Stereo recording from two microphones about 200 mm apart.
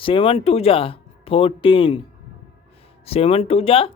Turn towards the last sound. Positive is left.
turn(degrees=30)  # may be behind; listen again after turning